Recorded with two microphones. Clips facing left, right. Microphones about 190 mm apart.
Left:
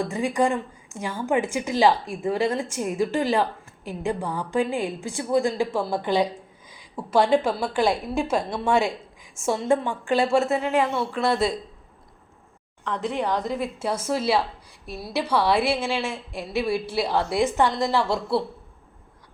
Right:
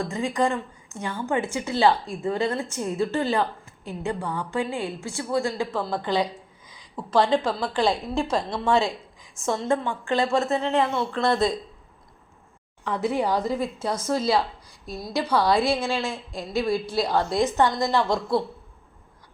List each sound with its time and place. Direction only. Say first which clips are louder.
0.0 s a woman's voice: left 2 dB; 10° left (ahead or behind)
12.8 s a woman's voice: right 2 dB; 10° right (ahead or behind); by 17.7 s 10° left (ahead or behind)
17.7 s a woman's voice: even; 30° left (ahead or behind)
17.9 s a woman's voice: even; 5° left (ahead or behind)